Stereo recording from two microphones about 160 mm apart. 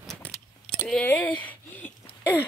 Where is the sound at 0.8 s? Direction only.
10° left (ahead or behind).